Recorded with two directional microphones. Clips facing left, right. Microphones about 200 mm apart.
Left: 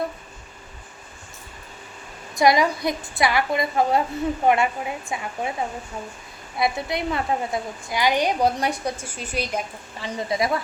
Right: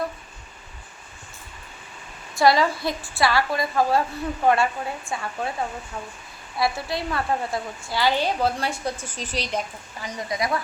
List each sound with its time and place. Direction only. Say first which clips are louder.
2.3 s a woman's voice: left 1 dB; 15° left (ahead or behind)
6.6 s a woman's voice: left 1 dB; 20° left (ahead or behind)
10.0 s a woman's voice: left 3 dB; 25° left (ahead or behind)